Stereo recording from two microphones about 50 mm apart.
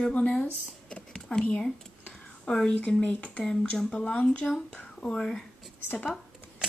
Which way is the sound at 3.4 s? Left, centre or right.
Centre.